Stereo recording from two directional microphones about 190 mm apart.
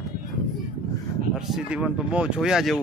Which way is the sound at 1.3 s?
Centre (ahead or behind).